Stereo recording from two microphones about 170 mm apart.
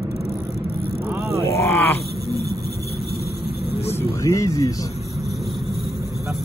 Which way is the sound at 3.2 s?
70° left (ahead or behind).